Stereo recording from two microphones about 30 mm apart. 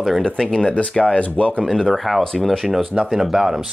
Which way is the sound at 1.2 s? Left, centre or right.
Left.